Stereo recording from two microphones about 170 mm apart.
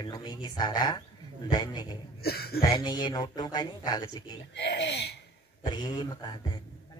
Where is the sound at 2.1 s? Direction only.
65° left (ahead or behind).